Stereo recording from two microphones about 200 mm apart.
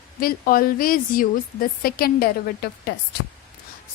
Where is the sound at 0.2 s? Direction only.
45° left (ahead or behind).